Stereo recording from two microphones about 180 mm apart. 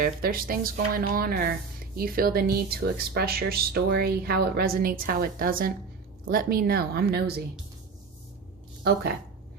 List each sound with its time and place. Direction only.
0.0 s speech: 55° right (ahead or behind)
8.8 s speech: 60° right (ahead or behind)